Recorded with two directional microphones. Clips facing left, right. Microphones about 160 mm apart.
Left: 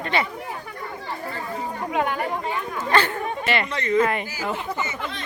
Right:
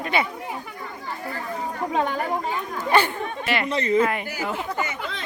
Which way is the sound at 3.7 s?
30° right (ahead or behind).